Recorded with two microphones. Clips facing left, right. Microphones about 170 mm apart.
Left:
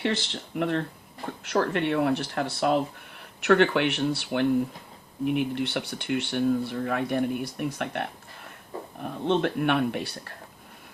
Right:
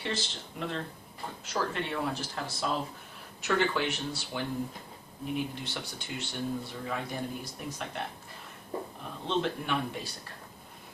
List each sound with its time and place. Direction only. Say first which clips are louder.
0.0 s speech: left 7 dB; 65° left (ahead or behind)